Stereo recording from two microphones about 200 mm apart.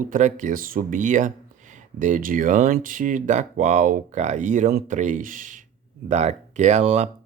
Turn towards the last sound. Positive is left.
turn(degrees=-35)  # may be behind; listen again after turning